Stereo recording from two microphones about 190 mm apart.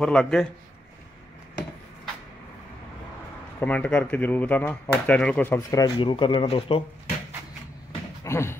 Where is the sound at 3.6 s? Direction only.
10° left (ahead or behind); by 6.8 s 30° left (ahead or behind).